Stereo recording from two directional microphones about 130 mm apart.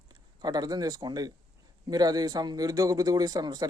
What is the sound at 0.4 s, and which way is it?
A man's voice, 30° right (ahead or behind).